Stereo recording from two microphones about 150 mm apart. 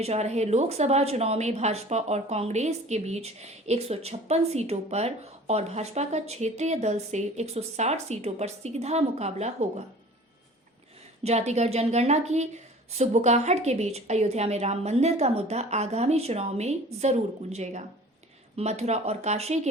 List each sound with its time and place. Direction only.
0.0 s a woman's voice: 45° right (ahead or behind)
11.2 s a woman's voice: 45° right (ahead or behind)